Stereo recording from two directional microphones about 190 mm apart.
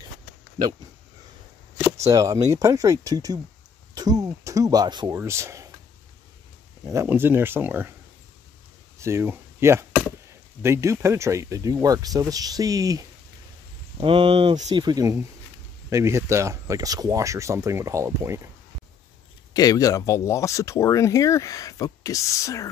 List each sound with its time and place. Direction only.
2.0 s speech: 20° right (ahead or behind)
6.9 s speech: 15° right (ahead or behind)
9.0 s speech: 15° right (ahead or behind)
19.5 s speech: 20° left (ahead or behind)